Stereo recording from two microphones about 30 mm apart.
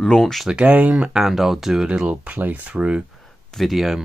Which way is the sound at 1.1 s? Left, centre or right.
Centre.